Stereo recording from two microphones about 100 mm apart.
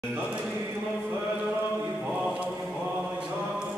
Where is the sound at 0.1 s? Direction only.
15° right (ahead or behind).